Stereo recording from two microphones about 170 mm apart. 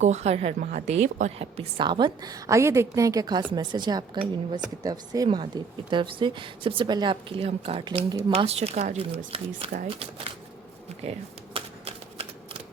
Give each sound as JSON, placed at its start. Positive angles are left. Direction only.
{"t": 0.0, "sound": "a woman's voice", "side_deg": -40}
{"t": 11.5, "sound": "typewriter", "side_deg": -35}